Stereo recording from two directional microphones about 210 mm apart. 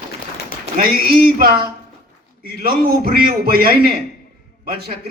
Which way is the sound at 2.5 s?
45° right (ahead or behind).